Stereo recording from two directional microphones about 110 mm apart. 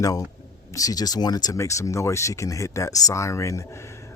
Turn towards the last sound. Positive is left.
turn(degrees=25)  # may be behind; listen again after turning